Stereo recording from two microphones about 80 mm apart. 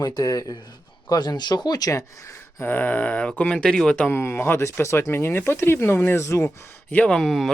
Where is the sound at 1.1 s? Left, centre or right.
Left.